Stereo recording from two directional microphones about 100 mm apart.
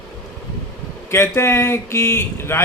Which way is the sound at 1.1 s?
25° left (ahead or behind).